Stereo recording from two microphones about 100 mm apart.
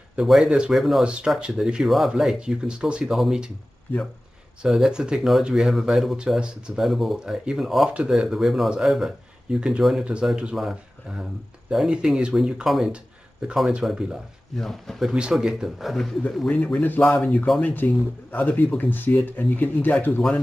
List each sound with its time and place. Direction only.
0.1 s speech: 5° right (ahead or behind)
4.6 s speech: 5° right (ahead or behind)
16.5 s speech: 15° left (ahead or behind)